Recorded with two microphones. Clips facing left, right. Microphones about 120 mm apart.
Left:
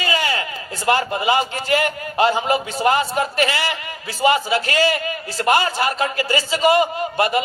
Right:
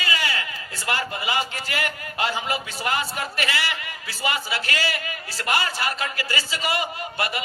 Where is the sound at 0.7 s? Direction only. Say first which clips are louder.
Left 9 dB; 30° left (ahead or behind).